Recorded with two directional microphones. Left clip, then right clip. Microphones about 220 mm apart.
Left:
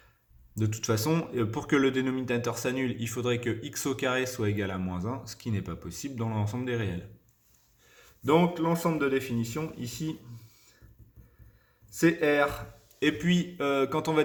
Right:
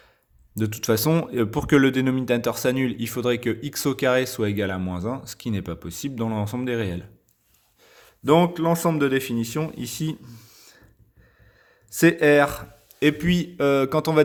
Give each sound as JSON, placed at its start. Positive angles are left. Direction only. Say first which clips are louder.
{"t": 0.5, "sound": "speech", "louder": "right 7 dB", "side_deg": -40}
{"t": 11.9, "sound": "speech", "louder": "right 8 dB", "side_deg": -45}